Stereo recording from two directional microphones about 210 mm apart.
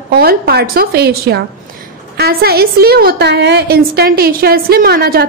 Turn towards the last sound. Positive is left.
turn(degrees=-50)  # may be behind; listen again after turning